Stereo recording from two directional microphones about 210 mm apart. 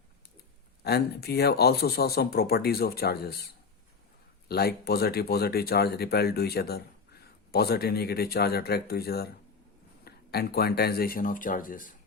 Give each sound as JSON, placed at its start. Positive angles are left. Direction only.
{"t": 0.9, "sound": "speech", "side_deg": 50}